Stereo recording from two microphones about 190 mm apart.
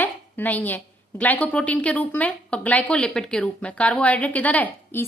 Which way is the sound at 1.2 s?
10° left (ahead or behind).